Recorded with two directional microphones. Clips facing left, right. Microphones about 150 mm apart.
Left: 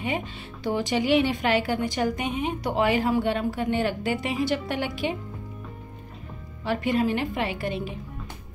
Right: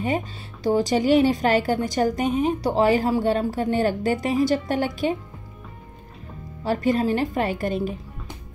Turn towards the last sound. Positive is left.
turn(degrees=-45)  # may be behind; listen again after turning